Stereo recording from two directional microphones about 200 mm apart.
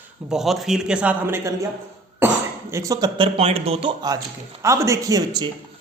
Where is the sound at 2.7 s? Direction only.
15° right (ahead or behind).